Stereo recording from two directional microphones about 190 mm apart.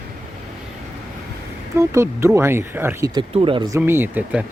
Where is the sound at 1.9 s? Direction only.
15° right (ahead or behind).